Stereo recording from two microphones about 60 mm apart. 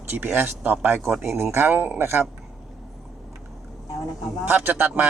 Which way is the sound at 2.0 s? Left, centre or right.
Right.